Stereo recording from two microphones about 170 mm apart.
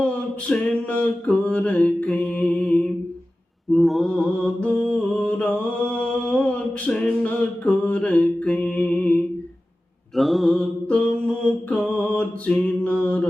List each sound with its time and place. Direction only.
0.0 s a sound: 5° left (ahead or behind)
3.7 s mantra: centre (ahead or behind)
4.6 s music: 10° left (ahead or behind)
10.2 s mantra: centre (ahead or behind)